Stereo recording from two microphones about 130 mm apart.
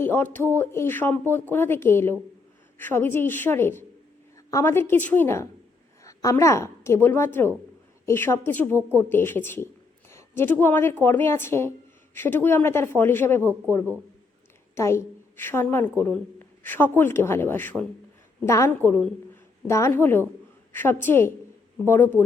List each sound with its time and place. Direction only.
0.0 s a sound: 15° left (ahead or behind)
0.5 s a woman's voice: 15° left (ahead or behind)
14.8 s a woman's voice: 20° left (ahead or behind)